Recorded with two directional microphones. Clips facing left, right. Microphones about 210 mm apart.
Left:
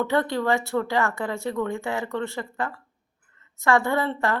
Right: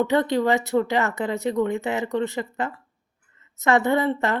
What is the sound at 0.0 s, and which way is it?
Speech, 20° right (ahead or behind).